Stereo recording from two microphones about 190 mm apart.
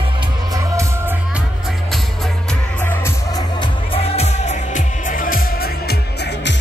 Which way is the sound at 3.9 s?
35° left (ahead or behind).